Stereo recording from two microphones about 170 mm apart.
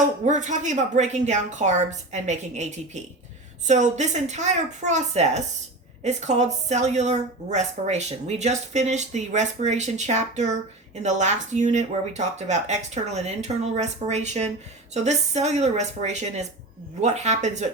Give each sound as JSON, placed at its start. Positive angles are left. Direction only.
{"t": 0.3, "sound": "a woman's voice", "side_deg": -45}